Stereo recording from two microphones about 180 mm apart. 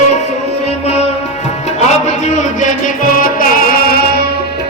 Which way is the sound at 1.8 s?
40° left (ahead or behind).